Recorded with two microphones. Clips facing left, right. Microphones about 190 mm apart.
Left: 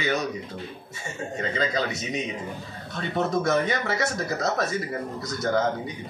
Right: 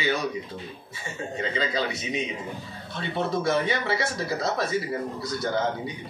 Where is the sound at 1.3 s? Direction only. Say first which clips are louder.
Left 1 dB; 45° left (ahead or behind).